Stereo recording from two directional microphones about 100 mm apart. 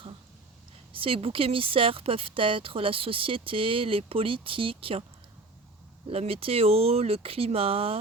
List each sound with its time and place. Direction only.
0.9 s speech: 65° right (ahead or behind)
6.1 s speech: 85° right